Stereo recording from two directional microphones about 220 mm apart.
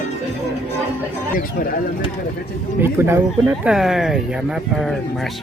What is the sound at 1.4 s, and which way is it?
Speech, 40° left (ahead or behind).